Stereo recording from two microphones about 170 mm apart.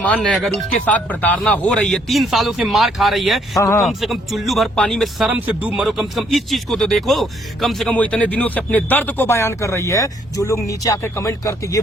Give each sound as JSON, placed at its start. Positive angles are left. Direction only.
{"t": 0.0, "sound": "speech", "side_deg": 5}